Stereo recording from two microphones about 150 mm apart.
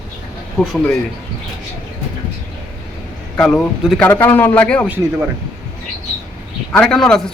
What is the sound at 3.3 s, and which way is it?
A man's voice, 5° left (ahead or behind).